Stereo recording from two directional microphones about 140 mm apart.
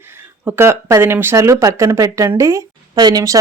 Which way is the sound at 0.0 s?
15° right (ahead or behind).